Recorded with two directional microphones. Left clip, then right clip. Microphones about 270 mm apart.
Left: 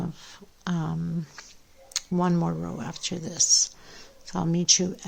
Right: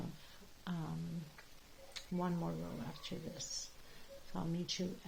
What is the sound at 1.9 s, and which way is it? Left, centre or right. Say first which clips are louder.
Speech: left 15 dB; left.